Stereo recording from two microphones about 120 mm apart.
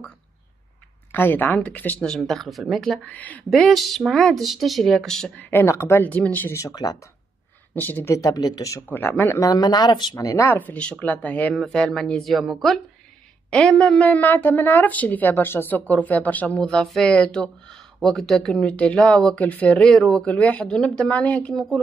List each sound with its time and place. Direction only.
1.1 s a woman's voice: 15° left (ahead or behind)
2.0 s speech: centre (ahead or behind)
3.1 s speech: 10° left (ahead or behind)
5.4 s a woman's voice: 20° left (ahead or behind)
6.6 s speech: 30° left (ahead or behind)
7.7 s speech: 15° left (ahead or behind); by 8.8 s 30° left (ahead or behind)
8.8 s a woman's voice: 15° left (ahead or behind)
9.4 s a woman's voice: 35° left (ahead or behind); by 21.8 s centre (ahead or behind)